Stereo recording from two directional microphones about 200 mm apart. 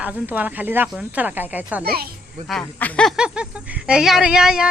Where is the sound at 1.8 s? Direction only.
50° right (ahead or behind).